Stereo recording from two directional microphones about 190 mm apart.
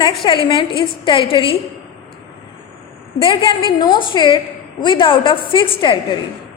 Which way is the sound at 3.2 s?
25° left (ahead or behind).